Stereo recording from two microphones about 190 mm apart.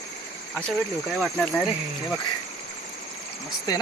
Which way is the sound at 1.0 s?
5° left (ahead or behind).